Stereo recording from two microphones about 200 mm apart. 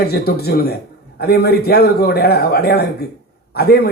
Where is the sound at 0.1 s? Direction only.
50° left (ahead or behind).